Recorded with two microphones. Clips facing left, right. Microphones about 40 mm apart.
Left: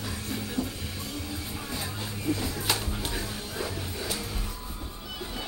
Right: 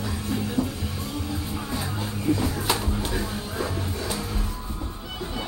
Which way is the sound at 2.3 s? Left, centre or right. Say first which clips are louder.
Right 5 dB; right.